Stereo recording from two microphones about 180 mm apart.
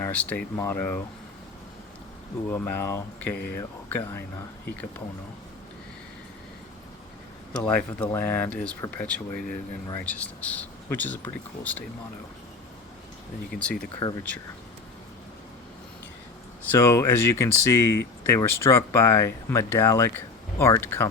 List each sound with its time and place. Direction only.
0.0 s speech: 10° left (ahead or behind)
2.5 s speech: 10° left (ahead or behind)
7.6 s speech: 5° left (ahead or behind)
13.5 s speech: centre (ahead or behind)
14.0 s speech: 20° left (ahead or behind)
16.7 s speech: 15° left (ahead or behind)